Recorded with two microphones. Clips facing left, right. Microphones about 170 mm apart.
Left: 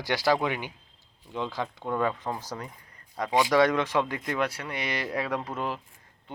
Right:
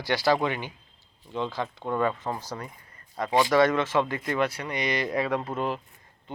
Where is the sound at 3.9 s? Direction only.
Centre (ahead or behind).